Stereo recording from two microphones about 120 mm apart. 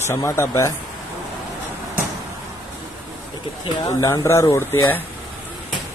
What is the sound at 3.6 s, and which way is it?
Speech, 25° left (ahead or behind).